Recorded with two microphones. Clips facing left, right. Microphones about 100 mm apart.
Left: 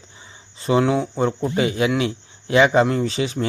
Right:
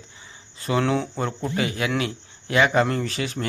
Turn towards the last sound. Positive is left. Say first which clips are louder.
# left 5 dB
turn(degrees=20)  # may be behind; listen again after turning